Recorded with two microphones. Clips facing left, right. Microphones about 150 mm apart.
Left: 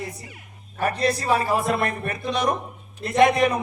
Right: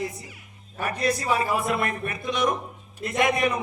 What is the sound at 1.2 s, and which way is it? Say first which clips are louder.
Speech: left 3 dB; 35° left (ahead or behind).